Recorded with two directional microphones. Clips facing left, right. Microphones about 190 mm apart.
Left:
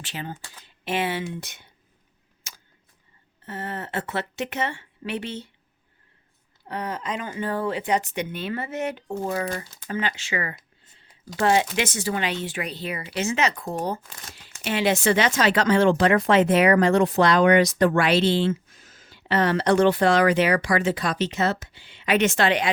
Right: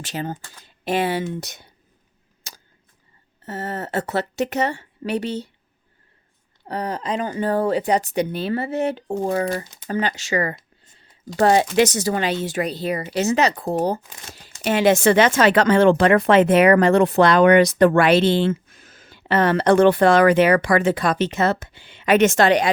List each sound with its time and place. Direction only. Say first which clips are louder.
0.0 s speech: right 6 dB; 40° right (ahead or behind)
2.5 s a sound: right 3 dB; 35° right (ahead or behind)
3.4 s speech: right 4 dB; 40° right (ahead or behind)
6.7 s speech: right 4 dB; 35° right (ahead or behind)